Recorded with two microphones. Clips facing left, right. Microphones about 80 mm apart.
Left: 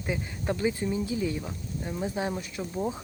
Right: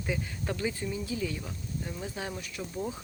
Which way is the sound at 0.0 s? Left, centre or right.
Centre.